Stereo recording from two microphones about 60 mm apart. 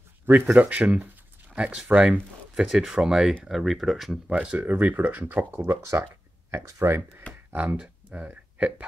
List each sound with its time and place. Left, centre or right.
0.6 s speech: right
2.5 s speech: centre
4.6 s speech: right
7.5 s speech: right